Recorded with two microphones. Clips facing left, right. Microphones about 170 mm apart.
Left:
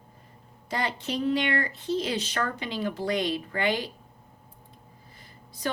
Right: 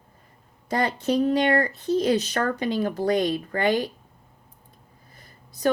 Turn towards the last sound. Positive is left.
turn(degrees=-45)  # may be behind; listen again after turning